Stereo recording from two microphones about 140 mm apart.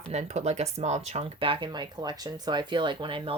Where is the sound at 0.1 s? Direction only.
50° right (ahead or behind).